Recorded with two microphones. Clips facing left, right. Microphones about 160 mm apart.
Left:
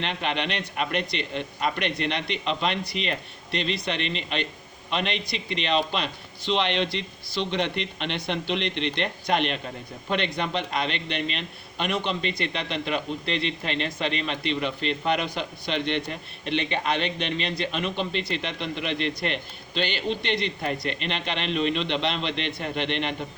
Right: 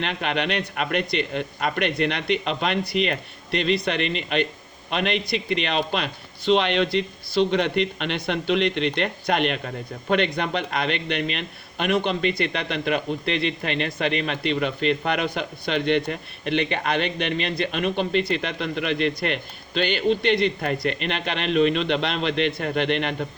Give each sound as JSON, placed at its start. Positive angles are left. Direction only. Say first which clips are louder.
{"t": 0.0, "sound": "a man's voice", "louder": "right 3 dB", "side_deg": -55}